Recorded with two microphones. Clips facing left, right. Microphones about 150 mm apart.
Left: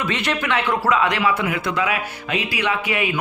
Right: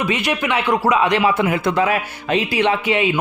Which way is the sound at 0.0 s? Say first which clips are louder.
Right 3 dB; 15° right (ahead or behind).